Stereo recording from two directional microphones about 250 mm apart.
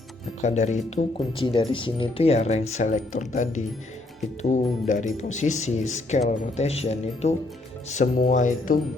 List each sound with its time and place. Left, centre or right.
0.4 s speech: left